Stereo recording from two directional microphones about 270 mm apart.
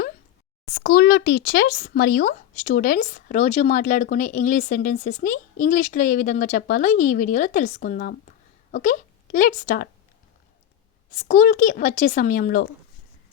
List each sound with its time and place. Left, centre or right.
0.7 s a woman's voice: left
11.1 s speech: left